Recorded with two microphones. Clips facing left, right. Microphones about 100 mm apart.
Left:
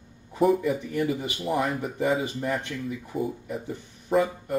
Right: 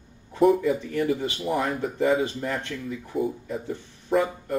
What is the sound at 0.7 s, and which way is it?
Speech, 15° left (ahead or behind).